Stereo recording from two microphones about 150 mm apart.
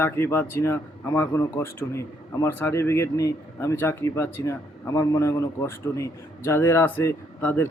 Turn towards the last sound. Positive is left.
turn(degrees=10)  # may be behind; listen again after turning